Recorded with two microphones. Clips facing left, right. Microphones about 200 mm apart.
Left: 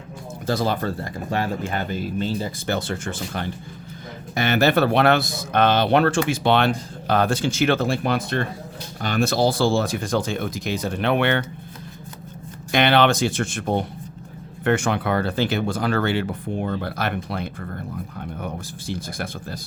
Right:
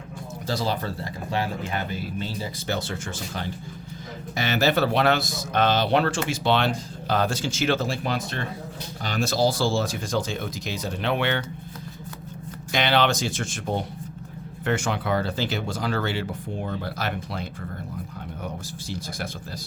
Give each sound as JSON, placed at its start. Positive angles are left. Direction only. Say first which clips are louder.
{"t": 0.4, "sound": "speech", "louder": "left 4 dB", "side_deg": 50}
{"t": 12.7, "sound": "speech", "louder": "left 5 dB", "side_deg": 55}